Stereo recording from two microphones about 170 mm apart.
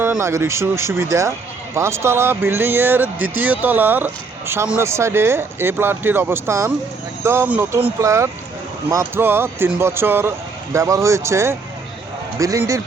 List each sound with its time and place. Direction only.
0.0 s speech: 15° right (ahead or behind)